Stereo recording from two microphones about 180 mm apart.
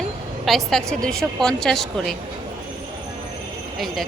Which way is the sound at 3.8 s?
Centre (ahead or behind).